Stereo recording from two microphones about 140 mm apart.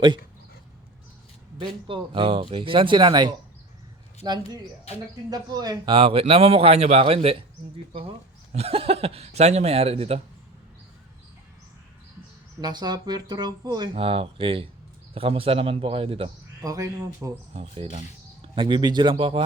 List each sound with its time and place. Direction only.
1.5 s speech: 40° right (ahead or behind)
8.5 s speech: 45° right (ahead or behind)
12.6 s speech: 30° right (ahead or behind)
14.0 s speech: 45° right (ahead or behind)
16.6 s speech: 20° right (ahead or behind)
17.5 s speech: 45° right (ahead or behind)